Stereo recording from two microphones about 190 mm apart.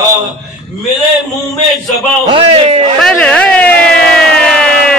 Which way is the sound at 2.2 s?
30° right (ahead or behind).